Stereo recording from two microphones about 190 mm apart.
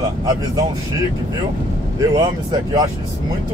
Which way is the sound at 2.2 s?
20° right (ahead or behind).